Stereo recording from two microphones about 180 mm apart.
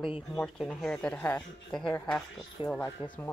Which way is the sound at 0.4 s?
5° left (ahead or behind).